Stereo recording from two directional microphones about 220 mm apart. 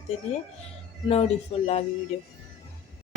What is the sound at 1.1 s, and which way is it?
Speech, 30° left (ahead or behind).